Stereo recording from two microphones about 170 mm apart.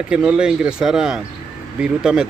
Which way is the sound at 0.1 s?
5° right (ahead or behind).